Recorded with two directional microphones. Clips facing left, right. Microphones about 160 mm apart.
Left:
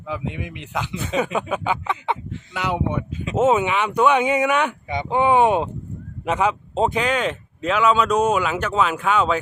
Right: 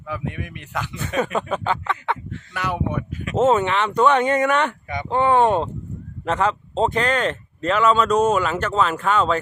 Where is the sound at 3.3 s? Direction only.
5° left (ahead or behind).